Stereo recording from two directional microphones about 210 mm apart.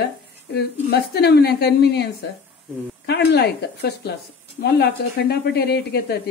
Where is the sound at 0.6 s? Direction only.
50° left (ahead or behind).